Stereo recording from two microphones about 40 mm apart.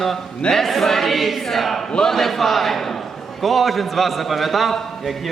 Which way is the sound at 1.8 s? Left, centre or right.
Centre.